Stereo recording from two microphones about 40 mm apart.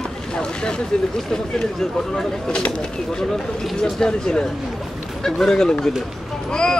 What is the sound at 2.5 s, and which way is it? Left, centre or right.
Speech, left.